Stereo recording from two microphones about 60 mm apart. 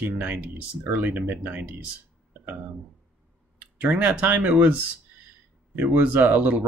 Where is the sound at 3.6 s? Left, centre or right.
Right.